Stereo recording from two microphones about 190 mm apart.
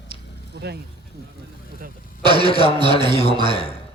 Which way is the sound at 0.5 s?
55° right (ahead or behind).